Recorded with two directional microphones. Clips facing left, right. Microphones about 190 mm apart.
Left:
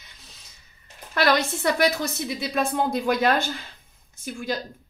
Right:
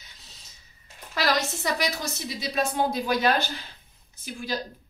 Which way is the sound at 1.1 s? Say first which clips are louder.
Left 4 dB; 55° left (ahead or behind).